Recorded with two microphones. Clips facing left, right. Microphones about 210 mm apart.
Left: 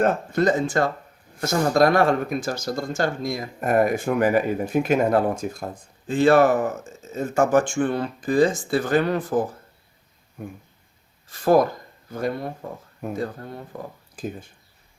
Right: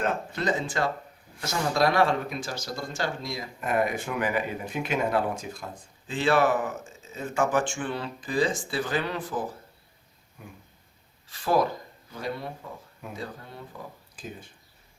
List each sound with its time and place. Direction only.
0.0 s speech: 45° left (ahead or behind)